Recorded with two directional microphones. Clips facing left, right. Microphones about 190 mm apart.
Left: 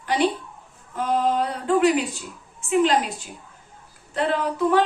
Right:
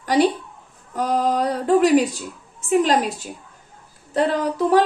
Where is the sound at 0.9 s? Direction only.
40° right (ahead or behind).